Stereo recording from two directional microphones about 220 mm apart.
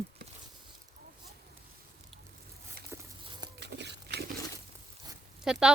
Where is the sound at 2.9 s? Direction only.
10° right (ahead or behind).